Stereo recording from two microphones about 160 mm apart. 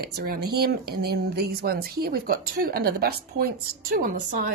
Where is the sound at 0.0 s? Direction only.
75° right (ahead or behind); by 4.5 s 60° right (ahead or behind).